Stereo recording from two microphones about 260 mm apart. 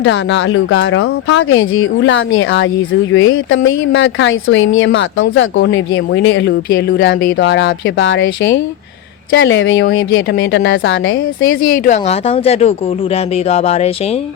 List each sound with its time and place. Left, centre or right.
0.0 s speech: left
11.7 s speech: left